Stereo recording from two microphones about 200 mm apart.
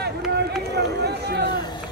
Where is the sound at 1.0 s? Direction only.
55° right (ahead or behind).